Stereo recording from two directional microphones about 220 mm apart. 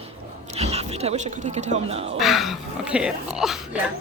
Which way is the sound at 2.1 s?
Centre (ahead or behind).